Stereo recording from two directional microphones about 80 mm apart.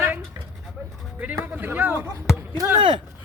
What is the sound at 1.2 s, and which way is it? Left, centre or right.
Speech, right.